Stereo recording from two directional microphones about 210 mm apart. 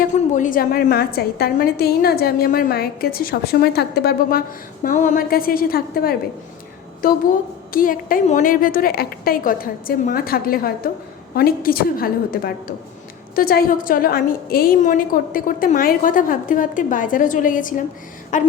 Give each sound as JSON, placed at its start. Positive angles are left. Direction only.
{"t": 0.0, "sound": "a woman's voice", "side_deg": 35}
{"t": 7.7, "sound": "a woman's voice", "side_deg": 40}